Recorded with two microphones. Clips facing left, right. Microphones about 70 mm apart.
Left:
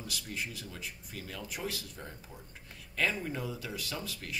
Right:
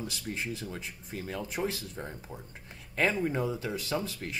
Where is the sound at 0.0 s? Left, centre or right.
Right.